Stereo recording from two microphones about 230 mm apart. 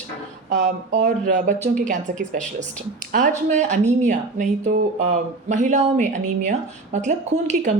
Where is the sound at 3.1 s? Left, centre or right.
Right.